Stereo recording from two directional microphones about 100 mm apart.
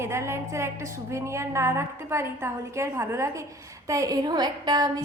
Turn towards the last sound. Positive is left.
turn(degrees=-40)  # may be behind; listen again after turning